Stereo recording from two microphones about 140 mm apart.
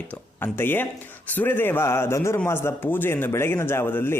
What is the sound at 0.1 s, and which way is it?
A man's voice, 15° left (ahead or behind).